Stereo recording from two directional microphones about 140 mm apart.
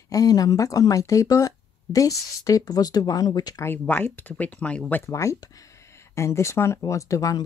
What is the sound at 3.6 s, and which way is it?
Speech, 15° left (ahead or behind).